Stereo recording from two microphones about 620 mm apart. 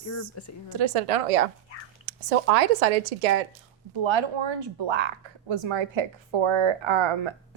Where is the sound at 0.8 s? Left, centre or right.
Right.